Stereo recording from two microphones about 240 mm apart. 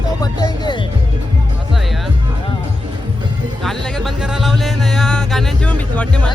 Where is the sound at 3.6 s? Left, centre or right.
Centre.